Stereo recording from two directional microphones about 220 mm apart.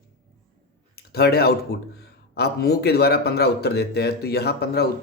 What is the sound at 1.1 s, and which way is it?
A man's voice, 45° left (ahead or behind).